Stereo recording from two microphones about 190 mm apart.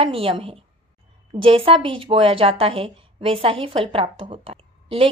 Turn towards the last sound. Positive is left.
turn(degrees=-30)  # may be behind; listen again after turning